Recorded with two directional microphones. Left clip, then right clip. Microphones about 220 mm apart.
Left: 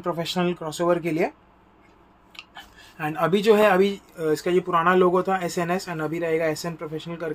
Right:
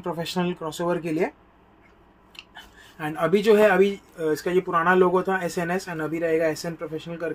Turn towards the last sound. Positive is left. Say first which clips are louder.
# even
turn(degrees=5)  # may be behind; listen again after turning